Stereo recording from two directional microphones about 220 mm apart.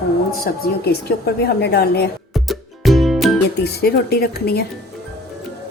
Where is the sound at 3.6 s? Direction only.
45° left (ahead or behind).